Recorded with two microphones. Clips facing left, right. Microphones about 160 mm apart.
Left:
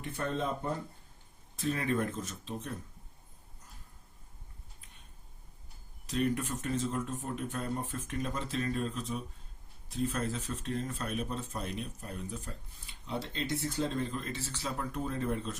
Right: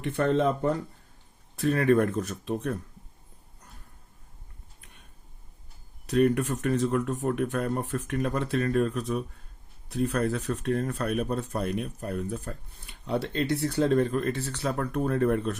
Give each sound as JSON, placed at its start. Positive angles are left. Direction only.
{"t": 0.0, "sound": "speech", "side_deg": -80}
{"t": 1.5, "sound": "speech", "side_deg": -65}
{"t": 6.1, "sound": "speech", "side_deg": -60}